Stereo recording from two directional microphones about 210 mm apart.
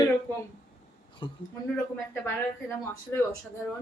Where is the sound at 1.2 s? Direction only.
25° left (ahead or behind).